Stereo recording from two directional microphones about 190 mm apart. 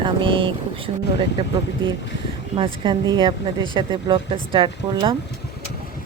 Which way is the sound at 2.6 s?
20° right (ahead or behind).